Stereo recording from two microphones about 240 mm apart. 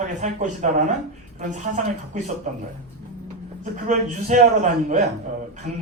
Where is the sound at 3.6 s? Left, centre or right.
Right.